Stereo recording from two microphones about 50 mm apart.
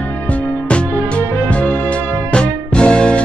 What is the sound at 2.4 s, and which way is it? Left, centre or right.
Music, centre.